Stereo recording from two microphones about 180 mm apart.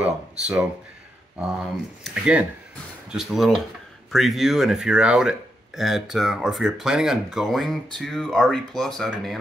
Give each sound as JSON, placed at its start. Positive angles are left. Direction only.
{"t": 0.0, "sound": "speech", "side_deg": -5}
{"t": 2.0, "sound": "speech", "side_deg": -5}